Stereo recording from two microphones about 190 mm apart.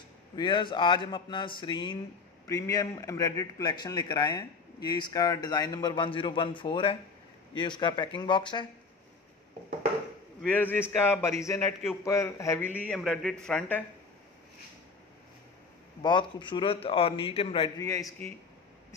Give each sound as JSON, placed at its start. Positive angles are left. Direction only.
{"t": 0.4, "sound": "a man's voice", "side_deg": 25}
{"t": 10.5, "sound": "a man's voice", "side_deg": 10}
{"t": 16.0, "sound": "a man's voice", "side_deg": 25}
{"t": 17.7, "sound": "a man's voice", "side_deg": 15}